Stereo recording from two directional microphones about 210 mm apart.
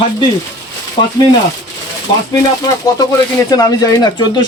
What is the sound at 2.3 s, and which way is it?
Speech, 15° left (ahead or behind).